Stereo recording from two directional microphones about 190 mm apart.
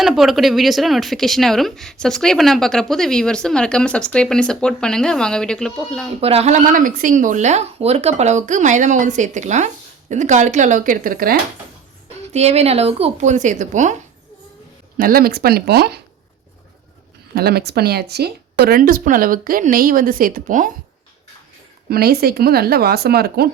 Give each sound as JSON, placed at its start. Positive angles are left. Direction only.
{"t": 0.0, "sound": "speech", "side_deg": 0}
{"t": 6.1, "sound": "speech", "side_deg": -30}
{"t": 12.3, "sound": "speech", "side_deg": -35}
{"t": 14.9, "sound": "speech", "side_deg": -50}
{"t": 17.3, "sound": "speech", "side_deg": -55}
{"t": 21.8, "sound": "speech", "side_deg": -55}